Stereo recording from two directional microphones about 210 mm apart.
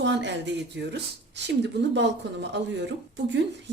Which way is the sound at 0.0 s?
55° right (ahead or behind).